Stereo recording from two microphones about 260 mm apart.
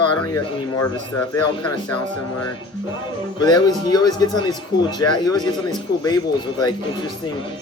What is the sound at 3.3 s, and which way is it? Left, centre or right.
Speech, centre.